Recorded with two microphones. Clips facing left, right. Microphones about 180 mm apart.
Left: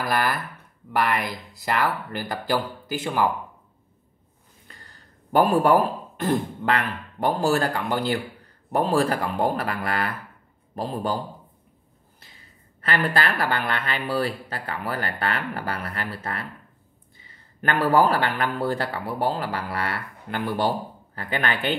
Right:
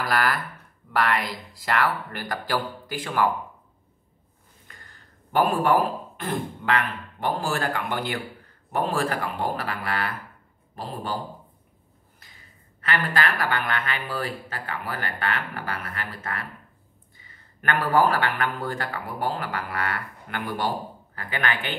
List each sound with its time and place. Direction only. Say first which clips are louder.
0.1 s speech: even; 20° left (ahead or behind)
5.3 s speech: left 3 dB; 40° left (ahead or behind)
12.8 s speech: left 2 dB; 35° left (ahead or behind)
18.0 s speech: left 1 dB; 35° left (ahead or behind)